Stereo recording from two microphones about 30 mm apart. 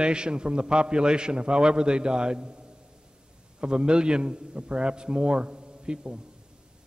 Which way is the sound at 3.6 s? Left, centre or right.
Right.